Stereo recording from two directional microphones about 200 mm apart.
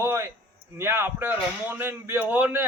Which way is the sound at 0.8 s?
10° right (ahead or behind).